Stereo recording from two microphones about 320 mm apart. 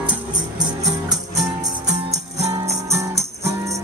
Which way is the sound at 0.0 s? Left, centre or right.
Centre.